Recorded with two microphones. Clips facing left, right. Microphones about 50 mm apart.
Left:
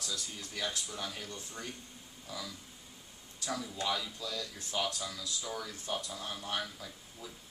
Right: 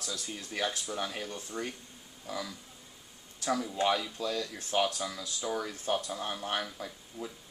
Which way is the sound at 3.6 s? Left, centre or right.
Right.